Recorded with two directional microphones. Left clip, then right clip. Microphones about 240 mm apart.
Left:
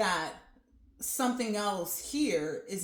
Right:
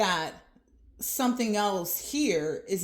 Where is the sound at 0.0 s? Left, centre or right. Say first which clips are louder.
Right 3 dB; right.